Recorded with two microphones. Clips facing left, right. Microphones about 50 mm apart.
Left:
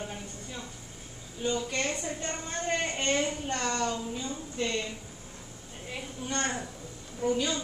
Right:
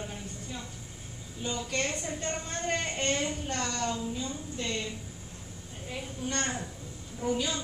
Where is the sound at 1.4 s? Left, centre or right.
Centre.